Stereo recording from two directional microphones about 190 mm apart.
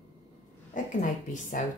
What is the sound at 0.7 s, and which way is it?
Speech, 40° left (ahead or behind).